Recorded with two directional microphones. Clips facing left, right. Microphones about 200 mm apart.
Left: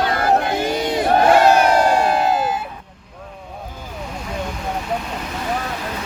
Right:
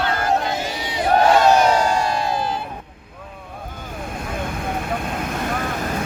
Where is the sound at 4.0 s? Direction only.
55° right (ahead or behind).